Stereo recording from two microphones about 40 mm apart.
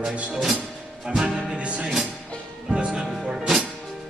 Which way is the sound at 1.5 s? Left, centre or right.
Right.